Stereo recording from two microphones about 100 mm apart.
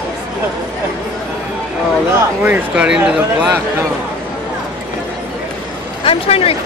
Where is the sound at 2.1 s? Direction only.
20° right (ahead or behind).